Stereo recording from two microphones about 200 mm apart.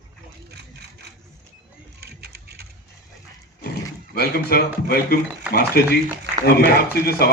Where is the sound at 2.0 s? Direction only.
50° right (ahead or behind).